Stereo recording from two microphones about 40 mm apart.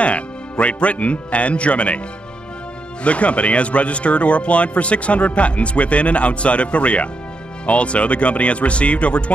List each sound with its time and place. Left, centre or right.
0.0 s speech: left
3.0 s speech: left